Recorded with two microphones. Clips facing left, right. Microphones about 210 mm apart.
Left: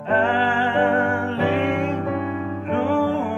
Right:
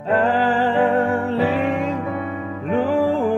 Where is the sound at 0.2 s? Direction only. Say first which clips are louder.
Right 3 dB; 35° right (ahead or behind).